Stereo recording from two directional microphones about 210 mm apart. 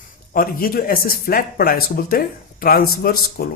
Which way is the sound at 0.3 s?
45° left (ahead or behind).